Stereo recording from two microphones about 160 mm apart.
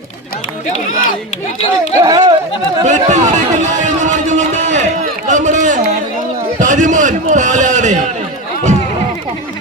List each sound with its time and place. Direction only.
0.9 s speech: 60° left (ahead or behind)
2.0 s speech: 25° right (ahead or behind)
2.8 s a sound: 50° right (ahead or behind)
6.6 s a man's voice: 50° right (ahead or behind)